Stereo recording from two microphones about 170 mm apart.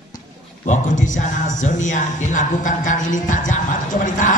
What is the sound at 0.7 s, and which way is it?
Music, 45° left (ahead or behind).